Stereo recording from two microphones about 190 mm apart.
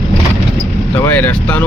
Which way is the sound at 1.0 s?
10° left (ahead or behind).